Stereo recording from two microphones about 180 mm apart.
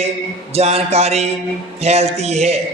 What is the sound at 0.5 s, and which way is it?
A man's voice, 35° right (ahead or behind).